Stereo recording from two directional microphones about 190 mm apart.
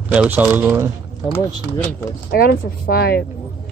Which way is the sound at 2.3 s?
55° left (ahead or behind).